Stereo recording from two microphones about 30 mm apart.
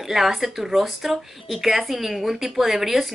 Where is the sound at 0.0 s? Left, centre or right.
Centre.